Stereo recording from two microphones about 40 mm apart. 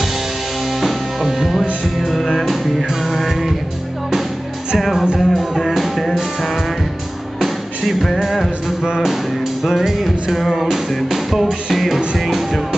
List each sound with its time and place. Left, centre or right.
0.7 s music: centre
4.7 s music: centre
5.0 s music: centre
5.4 s music: centre
7.3 s music: centre